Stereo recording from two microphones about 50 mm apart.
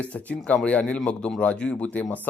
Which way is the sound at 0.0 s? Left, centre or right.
Left.